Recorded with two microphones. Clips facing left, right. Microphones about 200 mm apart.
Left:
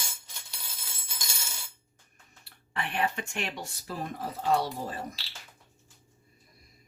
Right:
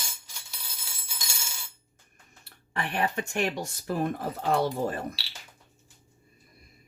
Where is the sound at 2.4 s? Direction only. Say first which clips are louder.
Right 2 dB; 45° right (ahead or behind).